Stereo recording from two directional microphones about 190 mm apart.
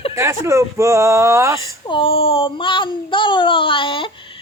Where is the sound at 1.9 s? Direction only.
30° left (ahead or behind).